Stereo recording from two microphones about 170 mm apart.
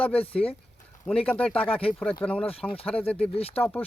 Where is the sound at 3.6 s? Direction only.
10° left (ahead or behind).